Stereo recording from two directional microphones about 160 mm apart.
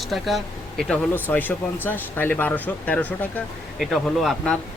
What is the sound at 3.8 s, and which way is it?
Speech, centre (ahead or behind).